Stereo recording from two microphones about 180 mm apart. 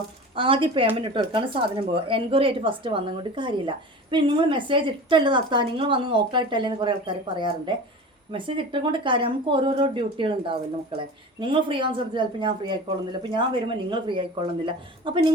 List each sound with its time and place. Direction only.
0.3 s a woman's voice: 30° right (ahead or behind)